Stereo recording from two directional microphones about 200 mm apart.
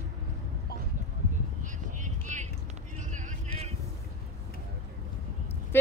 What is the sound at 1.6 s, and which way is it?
Vehicle, 40° right (ahead or behind).